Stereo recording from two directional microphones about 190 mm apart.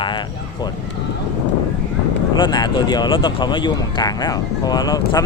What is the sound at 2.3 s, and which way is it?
Speech, 25° left (ahead or behind).